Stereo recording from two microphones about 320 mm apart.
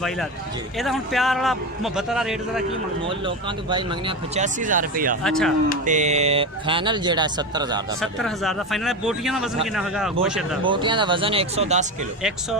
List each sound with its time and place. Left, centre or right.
0.8 s a man's voice: centre
3.0 s speech: centre
5.2 s a man's voice: centre
5.8 s speech: right
8.0 s a man's voice: centre
10.6 s speech: centre